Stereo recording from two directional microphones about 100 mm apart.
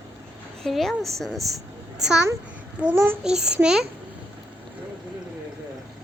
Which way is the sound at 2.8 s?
15° right (ahead or behind).